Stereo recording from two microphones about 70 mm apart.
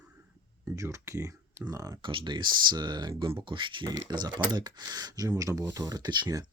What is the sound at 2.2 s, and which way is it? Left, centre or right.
Speech, right.